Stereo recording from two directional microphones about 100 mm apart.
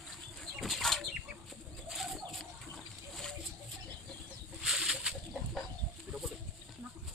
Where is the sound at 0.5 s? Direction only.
Centre (ahead or behind).